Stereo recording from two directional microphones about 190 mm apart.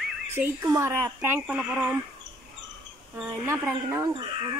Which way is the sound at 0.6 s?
15° right (ahead or behind).